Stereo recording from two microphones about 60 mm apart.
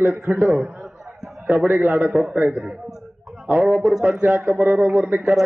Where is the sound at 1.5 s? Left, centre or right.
Centre.